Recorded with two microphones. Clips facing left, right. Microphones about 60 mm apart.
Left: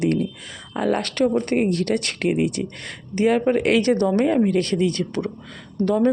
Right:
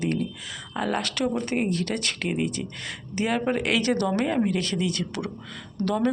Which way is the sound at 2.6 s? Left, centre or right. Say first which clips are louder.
Left 6 dB; centre.